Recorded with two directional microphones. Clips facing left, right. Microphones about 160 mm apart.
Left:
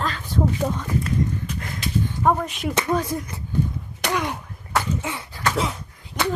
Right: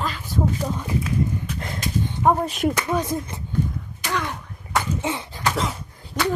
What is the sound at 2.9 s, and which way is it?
Speech, 20° right (ahead or behind).